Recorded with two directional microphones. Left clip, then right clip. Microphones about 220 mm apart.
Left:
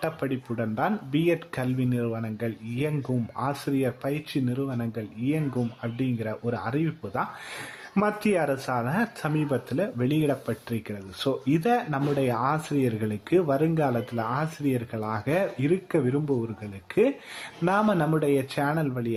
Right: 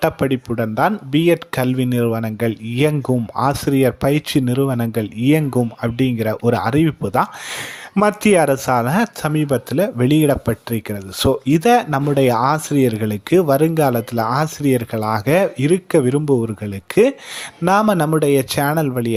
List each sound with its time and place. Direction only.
0.0 s speech: 30° right (ahead or behind)